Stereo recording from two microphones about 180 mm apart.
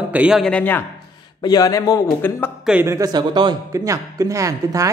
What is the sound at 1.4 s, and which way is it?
Speech, 20° left (ahead or behind).